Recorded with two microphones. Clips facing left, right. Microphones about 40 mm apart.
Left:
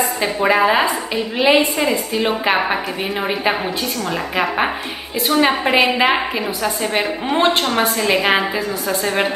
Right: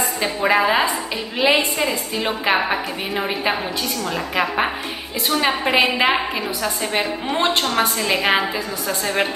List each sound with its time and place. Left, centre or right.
0.5 s a woman's voice: centre
1.9 s a woman's voice: left
2.4 s a woman's voice: centre